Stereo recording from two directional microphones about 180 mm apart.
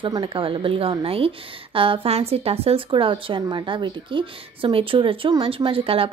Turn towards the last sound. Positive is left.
turn(degrees=-30)  # may be behind; listen again after turning